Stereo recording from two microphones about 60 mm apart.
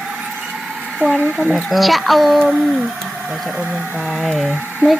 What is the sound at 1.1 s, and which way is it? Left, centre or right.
Speech, right.